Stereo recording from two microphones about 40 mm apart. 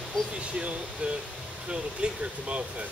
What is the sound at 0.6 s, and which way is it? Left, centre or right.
Speech, right.